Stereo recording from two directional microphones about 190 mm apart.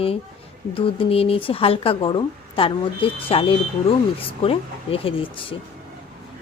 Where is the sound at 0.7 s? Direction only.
30° left (ahead or behind).